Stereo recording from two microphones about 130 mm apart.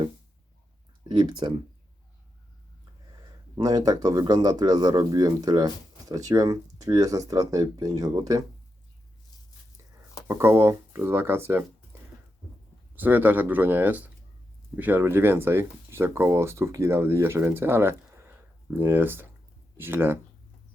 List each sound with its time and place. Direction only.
1.0 s speech: 40° right (ahead or behind)
3.5 s speech: 30° right (ahead or behind)
10.2 s speech: 20° right (ahead or behind)
13.0 s speech: 15° right (ahead or behind)